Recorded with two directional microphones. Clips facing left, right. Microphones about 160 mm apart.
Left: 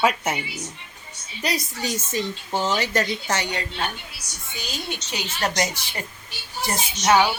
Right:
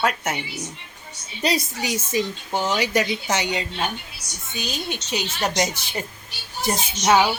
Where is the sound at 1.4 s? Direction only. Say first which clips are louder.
Right 4 dB; 25° right (ahead or behind).